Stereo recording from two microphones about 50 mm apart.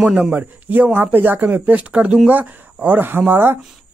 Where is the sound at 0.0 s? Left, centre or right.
Centre.